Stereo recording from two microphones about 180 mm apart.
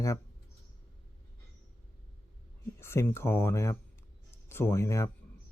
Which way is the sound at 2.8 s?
15° left (ahead or behind).